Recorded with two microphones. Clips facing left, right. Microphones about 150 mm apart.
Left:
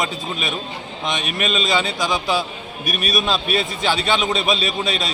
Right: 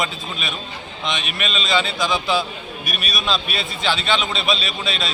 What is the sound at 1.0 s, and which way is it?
A man's voice, 45° left (ahead or behind).